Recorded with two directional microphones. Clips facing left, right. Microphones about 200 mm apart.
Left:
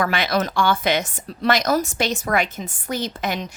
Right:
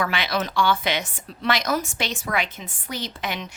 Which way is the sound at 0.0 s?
45° left (ahead or behind).